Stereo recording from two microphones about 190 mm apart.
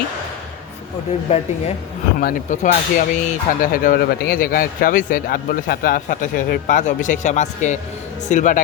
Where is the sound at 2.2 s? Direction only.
45° left (ahead or behind).